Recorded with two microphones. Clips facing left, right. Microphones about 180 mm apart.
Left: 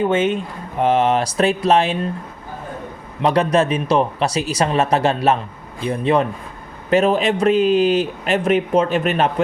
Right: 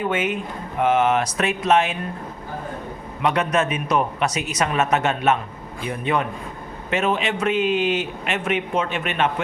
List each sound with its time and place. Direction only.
0.1 s a man's voice: 30° left (ahead or behind)
3.2 s a man's voice: 30° left (ahead or behind)